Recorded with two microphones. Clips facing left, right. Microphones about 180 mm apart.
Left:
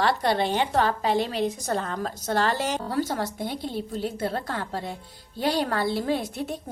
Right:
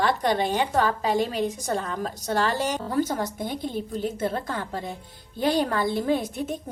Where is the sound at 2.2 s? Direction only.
40° left (ahead or behind).